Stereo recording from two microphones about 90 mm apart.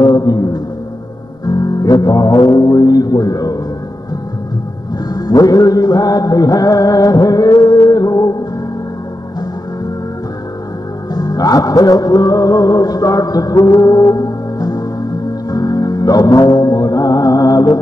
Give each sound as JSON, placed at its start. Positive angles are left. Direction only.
{"t": 0.0, "sound": "music", "side_deg": 45}
{"t": 5.1, "sound": "music", "side_deg": 45}
{"t": 11.1, "sound": "music", "side_deg": 45}